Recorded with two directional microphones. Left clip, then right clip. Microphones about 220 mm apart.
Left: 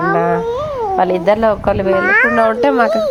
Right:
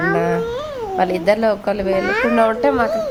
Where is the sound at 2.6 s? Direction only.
25° left (ahead or behind).